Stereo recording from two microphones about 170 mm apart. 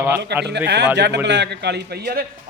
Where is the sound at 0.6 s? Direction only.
85° right.